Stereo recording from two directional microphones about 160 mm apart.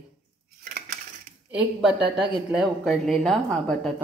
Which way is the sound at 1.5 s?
5° right (ahead or behind).